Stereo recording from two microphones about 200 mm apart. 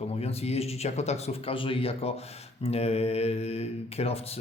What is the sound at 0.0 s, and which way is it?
A man's voice, 30° left (ahead or behind).